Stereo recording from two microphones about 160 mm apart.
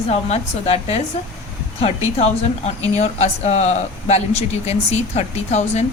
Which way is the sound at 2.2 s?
40° left (ahead or behind).